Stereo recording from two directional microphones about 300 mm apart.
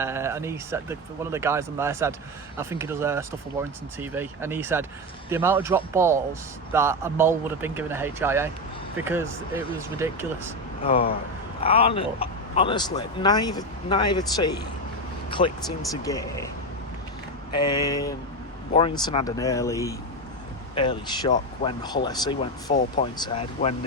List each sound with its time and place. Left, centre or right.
0.0 s speech: centre
11.6 s speech: centre
17.5 s speech: centre